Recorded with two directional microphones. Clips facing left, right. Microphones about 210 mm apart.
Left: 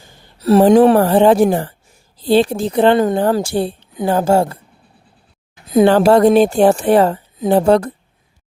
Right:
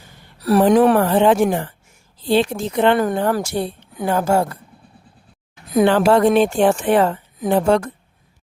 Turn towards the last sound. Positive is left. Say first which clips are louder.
# left 4 dB
turn(degrees=35)  # may be behind; listen again after turning